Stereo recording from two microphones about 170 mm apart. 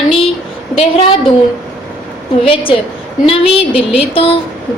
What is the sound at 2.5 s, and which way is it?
A woman's voice, 30° left (ahead or behind).